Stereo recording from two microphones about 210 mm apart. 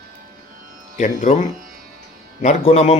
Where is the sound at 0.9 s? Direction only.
35° left (ahead or behind).